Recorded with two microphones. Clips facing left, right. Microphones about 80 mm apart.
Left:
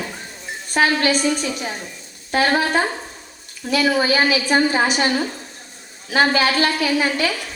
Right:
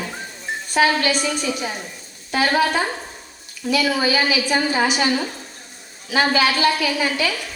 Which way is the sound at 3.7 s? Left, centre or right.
Left.